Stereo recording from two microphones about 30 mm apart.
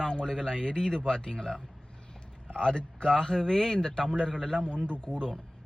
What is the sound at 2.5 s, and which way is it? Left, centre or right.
Speech, left.